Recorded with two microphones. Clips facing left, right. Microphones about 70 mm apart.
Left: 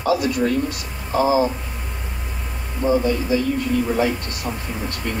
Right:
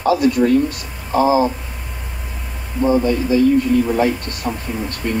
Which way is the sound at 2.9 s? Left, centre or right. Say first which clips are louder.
Right 2 dB; right.